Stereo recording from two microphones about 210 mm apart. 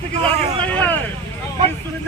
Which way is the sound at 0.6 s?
5° left (ahead or behind).